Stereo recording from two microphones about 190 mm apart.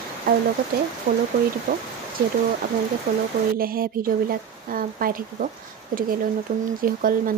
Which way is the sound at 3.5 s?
50° right (ahead or behind).